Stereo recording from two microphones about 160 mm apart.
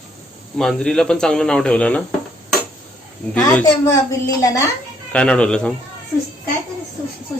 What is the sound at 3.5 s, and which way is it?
A child's voice, 20° left (ahead or behind).